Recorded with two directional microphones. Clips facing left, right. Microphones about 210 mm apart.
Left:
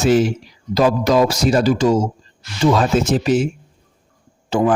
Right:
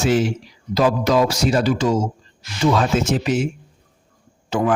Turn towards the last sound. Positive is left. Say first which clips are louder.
# left 3 dB
turn(degrees=30)  # may be behind; listen again after turning